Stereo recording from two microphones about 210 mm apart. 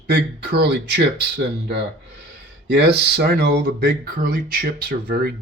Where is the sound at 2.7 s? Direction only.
50° right (ahead or behind).